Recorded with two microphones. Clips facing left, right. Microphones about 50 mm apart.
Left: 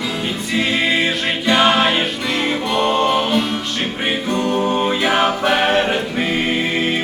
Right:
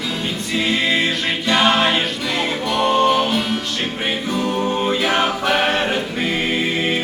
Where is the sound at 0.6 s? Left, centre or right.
Centre.